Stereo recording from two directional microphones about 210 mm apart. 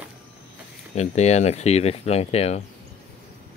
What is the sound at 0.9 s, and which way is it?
Speech, 30° left (ahead or behind).